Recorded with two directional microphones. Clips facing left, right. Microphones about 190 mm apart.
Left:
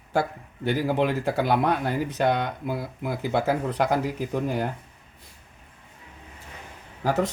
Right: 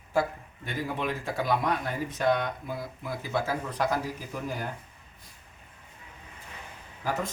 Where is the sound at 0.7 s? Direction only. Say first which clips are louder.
Left 8 dB; 80° left.